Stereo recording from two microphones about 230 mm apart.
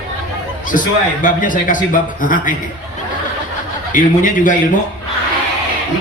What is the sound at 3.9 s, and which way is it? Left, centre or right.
Speech, left.